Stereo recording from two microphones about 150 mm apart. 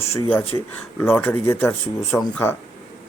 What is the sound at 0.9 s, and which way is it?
Speech, 15° left (ahead or behind).